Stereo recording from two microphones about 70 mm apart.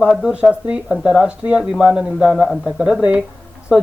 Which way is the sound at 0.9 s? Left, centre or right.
Centre.